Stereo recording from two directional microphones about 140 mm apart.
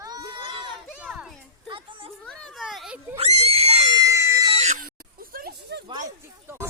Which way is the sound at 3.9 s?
25° right (ahead or behind).